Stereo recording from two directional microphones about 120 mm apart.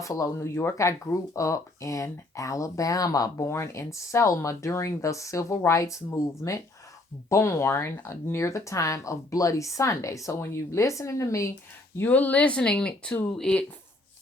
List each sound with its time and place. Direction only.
0.0 s speech: 25° left (ahead or behind)
11.9 s speech: 15° left (ahead or behind)